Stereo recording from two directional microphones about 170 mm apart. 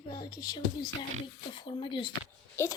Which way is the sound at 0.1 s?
25° left (ahead or behind).